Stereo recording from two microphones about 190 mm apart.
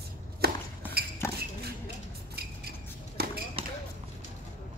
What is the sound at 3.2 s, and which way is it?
Basketball bounce, 55° right (ahead or behind).